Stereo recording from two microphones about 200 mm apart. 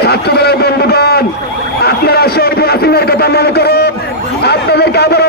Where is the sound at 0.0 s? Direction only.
55° left (ahead or behind).